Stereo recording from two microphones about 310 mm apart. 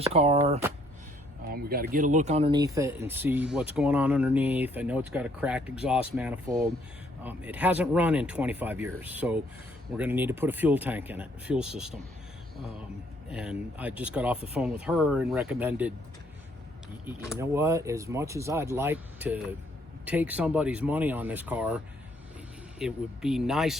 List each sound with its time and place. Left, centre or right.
0.0 s speech: centre
13.3 s speech: centre
17.1 s speech: centre
22.8 s speech: centre